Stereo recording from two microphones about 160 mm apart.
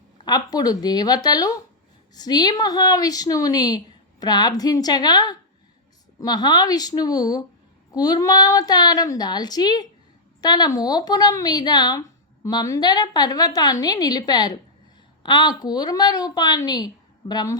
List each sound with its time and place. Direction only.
0.3 s a woman's voice: 25° left (ahead or behind)